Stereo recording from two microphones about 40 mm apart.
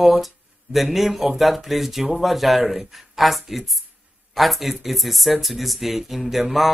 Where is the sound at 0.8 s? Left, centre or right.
Centre.